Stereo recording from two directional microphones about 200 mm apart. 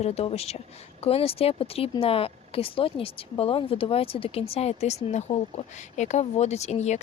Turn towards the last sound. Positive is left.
turn(degrees=35)  # may be behind; listen again after turning